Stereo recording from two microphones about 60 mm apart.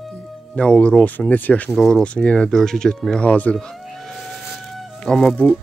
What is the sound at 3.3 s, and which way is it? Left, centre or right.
Speech, left.